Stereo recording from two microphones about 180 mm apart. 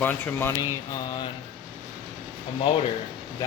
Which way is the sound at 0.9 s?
25° left (ahead or behind).